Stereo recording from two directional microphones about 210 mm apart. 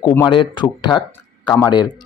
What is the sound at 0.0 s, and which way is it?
Speech, 10° left (ahead or behind).